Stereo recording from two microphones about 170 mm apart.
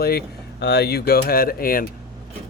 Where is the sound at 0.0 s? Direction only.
65° left (ahead or behind).